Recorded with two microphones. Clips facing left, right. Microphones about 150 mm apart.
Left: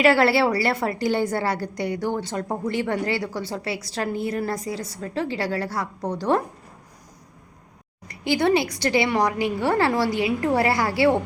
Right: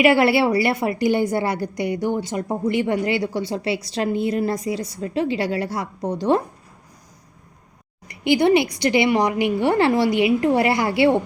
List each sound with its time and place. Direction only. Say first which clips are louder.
0.0 s a woman's voice: right 2 dB; 15° right (ahead or behind)
8.0 s a woman's voice: right 4 dB; 15° right (ahead or behind)